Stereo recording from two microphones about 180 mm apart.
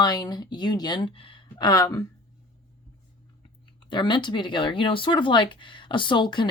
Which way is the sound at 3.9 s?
25° left (ahead or behind).